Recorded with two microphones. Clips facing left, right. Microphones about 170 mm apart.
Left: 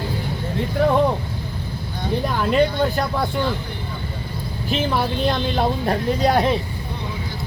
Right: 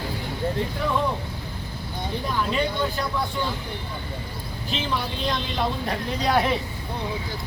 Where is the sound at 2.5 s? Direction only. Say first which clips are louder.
Left 10 dB; 60° left (ahead or behind).